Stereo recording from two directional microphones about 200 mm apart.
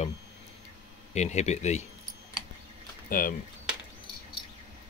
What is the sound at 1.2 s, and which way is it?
Speech, 35° left (ahead or behind).